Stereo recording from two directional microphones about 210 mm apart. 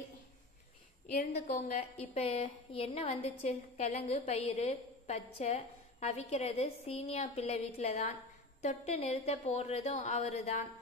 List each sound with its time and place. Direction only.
1.3 s a woman's voice: 30° left (ahead or behind)